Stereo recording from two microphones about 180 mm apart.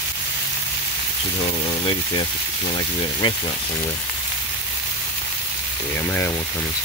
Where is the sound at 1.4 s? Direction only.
25° left (ahead or behind).